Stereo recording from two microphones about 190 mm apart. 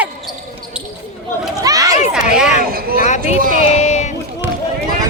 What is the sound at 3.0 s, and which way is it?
Speech, 40° left (ahead or behind).